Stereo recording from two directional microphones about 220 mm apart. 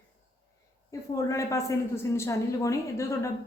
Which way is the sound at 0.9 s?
15° left (ahead or behind).